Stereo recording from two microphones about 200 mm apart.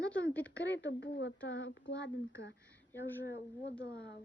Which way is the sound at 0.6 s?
65° left (ahead or behind).